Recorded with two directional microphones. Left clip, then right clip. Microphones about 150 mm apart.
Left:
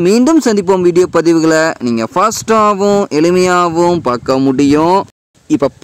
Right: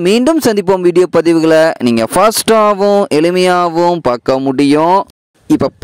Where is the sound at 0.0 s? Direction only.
65° right (ahead or behind).